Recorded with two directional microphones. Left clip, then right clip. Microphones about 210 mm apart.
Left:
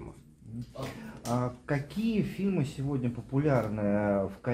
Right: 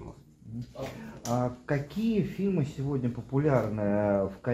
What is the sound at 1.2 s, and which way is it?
Speech, centre (ahead or behind).